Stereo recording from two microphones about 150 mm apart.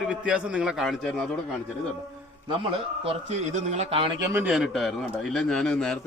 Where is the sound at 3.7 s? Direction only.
45° right (ahead or behind).